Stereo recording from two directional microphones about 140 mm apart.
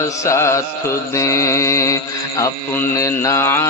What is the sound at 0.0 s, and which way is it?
Mantra, 20° left (ahead or behind).